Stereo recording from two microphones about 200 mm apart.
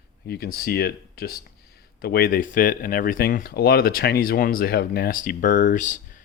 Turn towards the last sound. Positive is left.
turn(degrees=40)  # may be behind; listen again after turning